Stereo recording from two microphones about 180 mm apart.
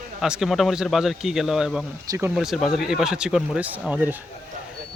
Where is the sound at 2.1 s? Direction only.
15° right (ahead or behind).